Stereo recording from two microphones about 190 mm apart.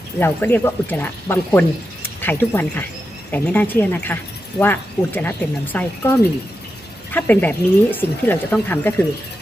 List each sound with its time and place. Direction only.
0.2 s speech: 10° left (ahead or behind)